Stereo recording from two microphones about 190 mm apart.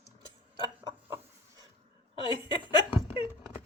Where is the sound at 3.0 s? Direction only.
30° left (ahead or behind).